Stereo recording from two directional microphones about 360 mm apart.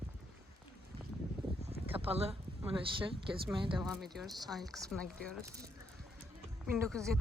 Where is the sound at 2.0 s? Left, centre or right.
Centre.